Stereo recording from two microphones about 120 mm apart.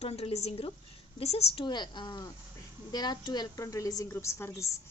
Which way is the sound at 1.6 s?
40° left (ahead or behind).